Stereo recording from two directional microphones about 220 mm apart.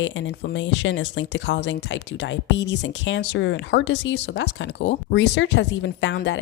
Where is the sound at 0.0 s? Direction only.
55° left (ahead or behind).